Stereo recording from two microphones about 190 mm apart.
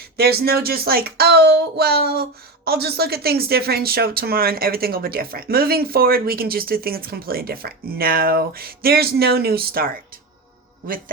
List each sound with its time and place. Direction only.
0.2 s speech: 55° right (ahead or behind)